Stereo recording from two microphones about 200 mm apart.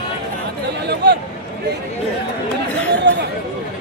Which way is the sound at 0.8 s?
55° right (ahead or behind).